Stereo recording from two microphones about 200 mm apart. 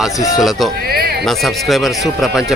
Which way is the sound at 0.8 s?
50° right (ahead or behind).